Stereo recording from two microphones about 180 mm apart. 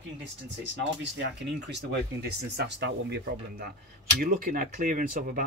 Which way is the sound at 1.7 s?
65° right (ahead or behind).